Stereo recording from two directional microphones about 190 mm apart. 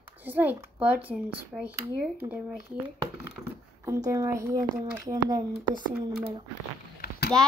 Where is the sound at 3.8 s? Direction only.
20° right (ahead or behind).